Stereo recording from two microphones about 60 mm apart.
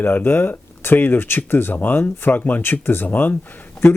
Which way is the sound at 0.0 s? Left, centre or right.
Left.